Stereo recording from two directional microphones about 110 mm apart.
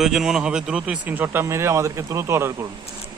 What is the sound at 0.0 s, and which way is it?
Speech, 5° right (ahead or behind).